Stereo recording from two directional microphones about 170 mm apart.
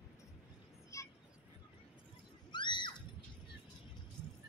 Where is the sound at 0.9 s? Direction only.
20° left (ahead or behind).